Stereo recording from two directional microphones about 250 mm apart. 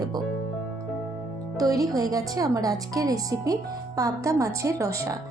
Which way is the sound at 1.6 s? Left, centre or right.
Centre.